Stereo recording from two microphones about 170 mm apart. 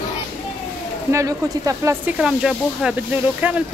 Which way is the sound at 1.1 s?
20° right (ahead or behind).